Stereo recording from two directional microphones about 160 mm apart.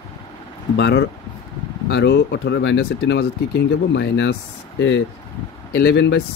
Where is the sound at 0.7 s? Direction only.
90° left.